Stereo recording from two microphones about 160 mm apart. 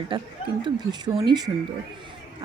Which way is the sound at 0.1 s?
30° right (ahead or behind).